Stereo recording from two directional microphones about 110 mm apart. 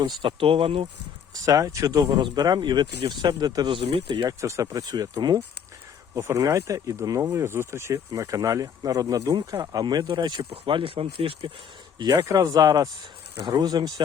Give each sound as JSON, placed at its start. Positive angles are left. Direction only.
{"t": 0.2, "sound": "speech", "side_deg": -55}
{"t": 1.3, "sound": "speech", "side_deg": -30}
{"t": 3.8, "sound": "speech", "side_deg": -55}
{"t": 4.3, "sound": "speech", "side_deg": -30}
{"t": 10.5, "sound": "speech", "side_deg": -55}
{"t": 11.9, "sound": "speech", "side_deg": -35}